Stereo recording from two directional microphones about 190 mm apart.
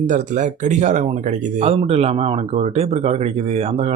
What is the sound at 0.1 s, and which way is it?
Speech, 40° right (ahead or behind).